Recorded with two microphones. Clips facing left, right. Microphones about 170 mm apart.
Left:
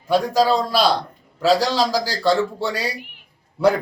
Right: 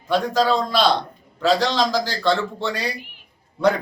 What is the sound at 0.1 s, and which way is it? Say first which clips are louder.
A man's voice: left 2 dB; 10° left (ahead or behind).